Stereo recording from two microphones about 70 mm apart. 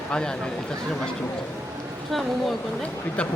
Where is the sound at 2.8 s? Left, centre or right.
Centre.